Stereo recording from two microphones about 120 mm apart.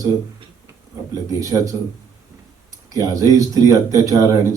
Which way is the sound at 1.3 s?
30° right (ahead or behind).